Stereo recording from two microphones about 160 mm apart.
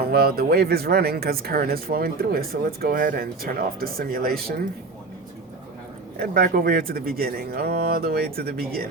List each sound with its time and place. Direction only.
0.0 s speech: 75° right (ahead or behind)
6.1 s speech: 70° right (ahead or behind)